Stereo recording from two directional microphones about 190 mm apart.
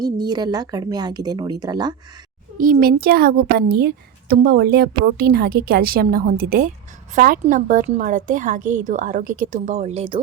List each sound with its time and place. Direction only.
0.0 s speech: 20° right (ahead or behind)
2.6 s a child's voice: 45° right (ahead or behind); by 10.2 s 30° right (ahead or behind)